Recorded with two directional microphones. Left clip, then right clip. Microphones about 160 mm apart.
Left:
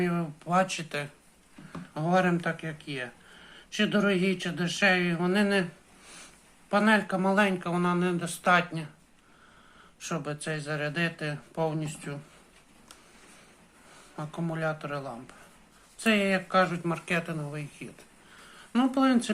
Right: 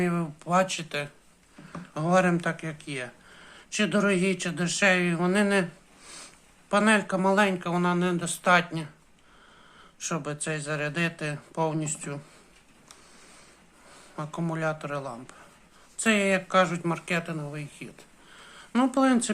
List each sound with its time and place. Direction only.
0.0 s speech: 20° right (ahead or behind); by 1.1 s 5° right (ahead or behind)
1.7 s speech: 20° right (ahead or behind)
6.7 s speech: 20° right (ahead or behind)
10.0 s speech: 15° right (ahead or behind)
14.2 s speech: 20° right (ahead or behind)
18.4 s speech: 20° right (ahead or behind)